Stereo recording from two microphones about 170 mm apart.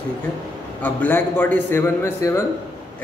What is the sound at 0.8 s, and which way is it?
A man's voice, 10° left (ahead or behind).